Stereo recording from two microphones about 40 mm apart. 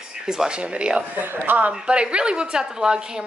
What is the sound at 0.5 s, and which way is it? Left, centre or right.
Speech, right.